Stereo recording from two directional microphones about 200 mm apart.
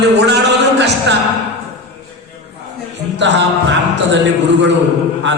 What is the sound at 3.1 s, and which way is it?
A man's voice, 65° right (ahead or behind).